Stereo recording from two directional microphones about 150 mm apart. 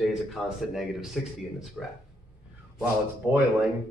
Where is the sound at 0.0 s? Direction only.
Centre (ahead or behind).